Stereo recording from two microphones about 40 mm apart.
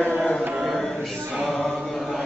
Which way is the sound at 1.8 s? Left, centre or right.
Centre.